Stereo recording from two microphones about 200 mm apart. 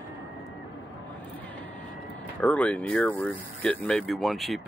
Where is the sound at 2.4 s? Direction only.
5° left (ahead or behind).